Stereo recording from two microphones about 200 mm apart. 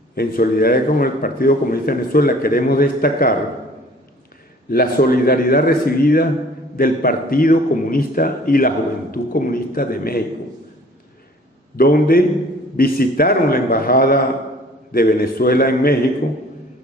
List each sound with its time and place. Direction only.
0.1 s a man's voice: 50° left (ahead or behind)
4.6 s a man's voice: 45° left (ahead or behind)
11.7 s a man's voice: 45° left (ahead or behind)